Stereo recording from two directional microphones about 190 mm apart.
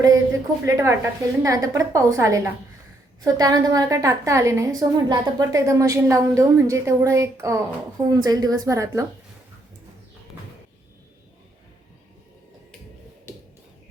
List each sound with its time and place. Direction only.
0.6 s a woman's voice: 15° right (ahead or behind)